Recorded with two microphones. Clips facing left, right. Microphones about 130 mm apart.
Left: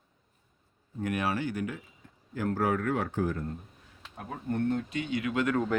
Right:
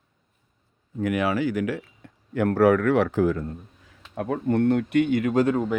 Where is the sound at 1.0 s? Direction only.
90° right; by 5.4 s 45° right (ahead or behind).